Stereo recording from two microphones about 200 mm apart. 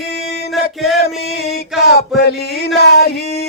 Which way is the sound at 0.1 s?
55° left (ahead or behind).